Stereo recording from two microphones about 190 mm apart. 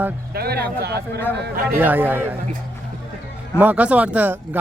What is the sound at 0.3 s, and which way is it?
Speech, 55° right (ahead or behind).